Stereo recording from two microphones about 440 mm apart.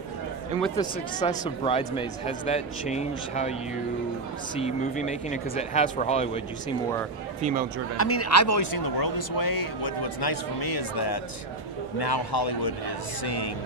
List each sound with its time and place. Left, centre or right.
0.6 s speech: centre
4.6 s speech: centre
8.0 s speech: left